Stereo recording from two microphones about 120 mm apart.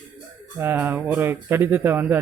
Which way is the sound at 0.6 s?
15° right (ahead or behind).